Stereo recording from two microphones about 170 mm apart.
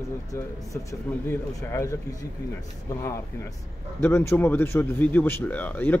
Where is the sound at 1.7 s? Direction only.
15° left (ahead or behind).